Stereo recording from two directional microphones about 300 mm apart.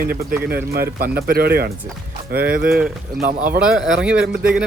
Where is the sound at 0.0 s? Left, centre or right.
Right.